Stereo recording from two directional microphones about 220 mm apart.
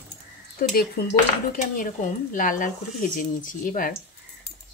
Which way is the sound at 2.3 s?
35° left (ahead or behind).